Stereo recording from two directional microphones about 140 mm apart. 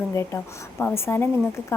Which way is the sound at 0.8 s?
15° left (ahead or behind).